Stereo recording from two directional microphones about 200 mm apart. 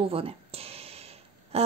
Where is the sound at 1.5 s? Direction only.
30° right (ahead or behind).